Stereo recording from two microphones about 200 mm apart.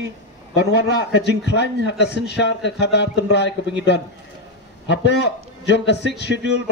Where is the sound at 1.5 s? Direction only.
60° left (ahead or behind).